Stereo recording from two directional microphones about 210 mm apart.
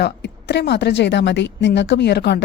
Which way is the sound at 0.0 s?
55° left (ahead or behind).